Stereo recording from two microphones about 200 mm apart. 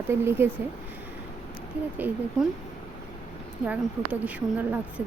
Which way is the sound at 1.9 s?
10° right (ahead or behind).